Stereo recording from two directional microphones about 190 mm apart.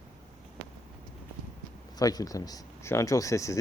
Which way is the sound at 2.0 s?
20° left (ahead or behind).